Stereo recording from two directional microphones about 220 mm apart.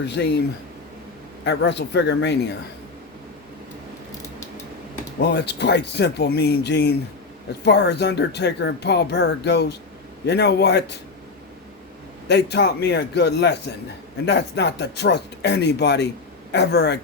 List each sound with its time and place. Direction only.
0.0 s speech: 50° left (ahead or behind)
1.5 s speech: 50° left (ahead or behind)
5.2 s speech: 50° left (ahead or behind)
12.3 s speech: 50° left (ahead or behind)